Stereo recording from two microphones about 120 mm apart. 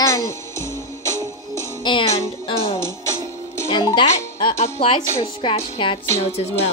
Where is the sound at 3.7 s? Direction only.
45° left (ahead or behind).